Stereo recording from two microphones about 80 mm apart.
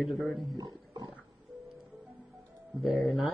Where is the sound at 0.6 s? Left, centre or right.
Right.